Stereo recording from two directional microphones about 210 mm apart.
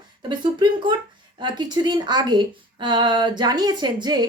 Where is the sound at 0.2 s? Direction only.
20° right (ahead or behind).